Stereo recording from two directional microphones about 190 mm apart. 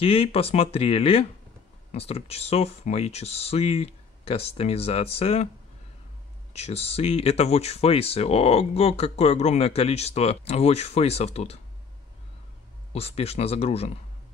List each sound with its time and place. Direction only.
0.0 s speech: 30° left (ahead or behind)
6.5 s speech: 35° left (ahead or behind)
12.9 s speech: 30° left (ahead or behind)